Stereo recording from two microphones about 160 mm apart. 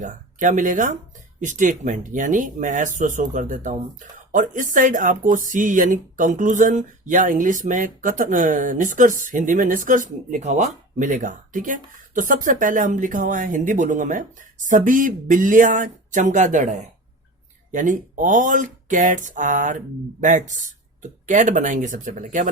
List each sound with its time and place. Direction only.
0.0 s speech: 55° right (ahead or behind)